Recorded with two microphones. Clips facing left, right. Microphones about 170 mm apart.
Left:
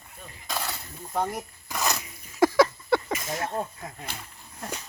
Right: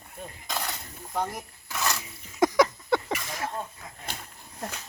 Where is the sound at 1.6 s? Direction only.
15° left (ahead or behind).